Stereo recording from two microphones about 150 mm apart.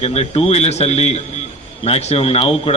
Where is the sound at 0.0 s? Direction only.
40° left (ahead or behind).